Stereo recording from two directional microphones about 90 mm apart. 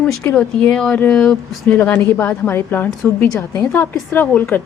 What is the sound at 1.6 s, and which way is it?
A woman's voice, 20° left (ahead or behind).